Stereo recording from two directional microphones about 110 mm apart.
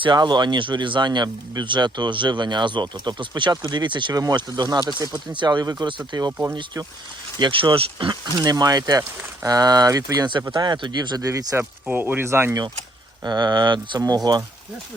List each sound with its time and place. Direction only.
0.0 s speech: 45° right (ahead or behind)
7.3 s speech: 50° right (ahead or behind); by 11.6 s 30° right (ahead or behind)
11.9 s speech: 15° right (ahead or behind)
13.2 s speech: 40° right (ahead or behind)